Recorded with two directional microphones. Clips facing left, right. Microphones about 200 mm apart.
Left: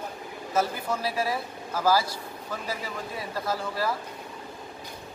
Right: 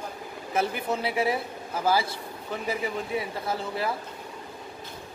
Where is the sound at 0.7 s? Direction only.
20° right (ahead or behind).